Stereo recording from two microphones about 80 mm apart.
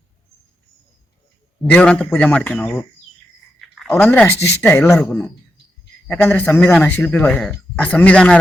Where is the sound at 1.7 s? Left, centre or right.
Centre.